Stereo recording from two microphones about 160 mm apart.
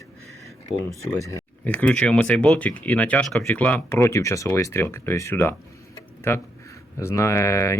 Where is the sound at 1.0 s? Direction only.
20° left (ahead or behind).